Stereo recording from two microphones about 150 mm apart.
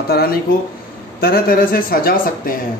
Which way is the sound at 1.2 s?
80° left.